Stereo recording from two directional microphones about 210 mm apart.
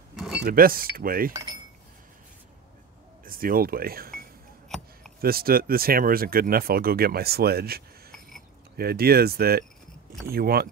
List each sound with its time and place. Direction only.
0.1 s power windows: centre (ahead or behind)
0.4 s speech: 45° right (ahead or behind)
3.3 s speech: 45° right (ahead or behind)
4.6 s a sound: centre (ahead or behind)
5.2 s speech: 45° right (ahead or behind)